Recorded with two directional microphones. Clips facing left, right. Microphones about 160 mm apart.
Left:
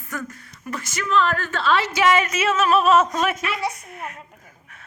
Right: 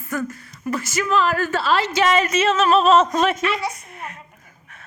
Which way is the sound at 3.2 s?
5° left (ahead or behind).